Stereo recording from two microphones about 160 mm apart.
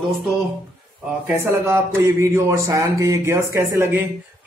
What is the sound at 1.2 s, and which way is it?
A man's voice, 15° right (ahead or behind).